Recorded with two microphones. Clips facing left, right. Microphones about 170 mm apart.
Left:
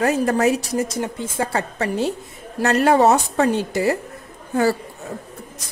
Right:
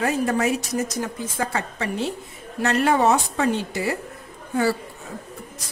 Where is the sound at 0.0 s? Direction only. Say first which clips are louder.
Left 4 dB; 40° left (ahead or behind).